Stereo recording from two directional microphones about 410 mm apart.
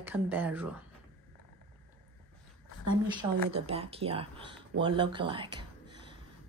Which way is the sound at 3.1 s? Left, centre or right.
Centre.